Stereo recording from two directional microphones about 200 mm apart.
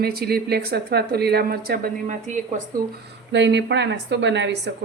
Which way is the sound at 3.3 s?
60° right (ahead or behind).